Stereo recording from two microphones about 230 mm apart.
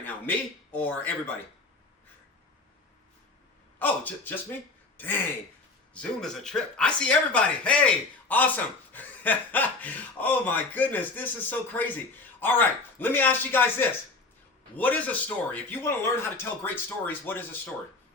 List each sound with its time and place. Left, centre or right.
0.0 s a man's voice: centre
3.8 s speech: centre